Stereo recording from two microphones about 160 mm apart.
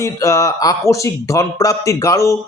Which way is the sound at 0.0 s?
20° left (ahead or behind).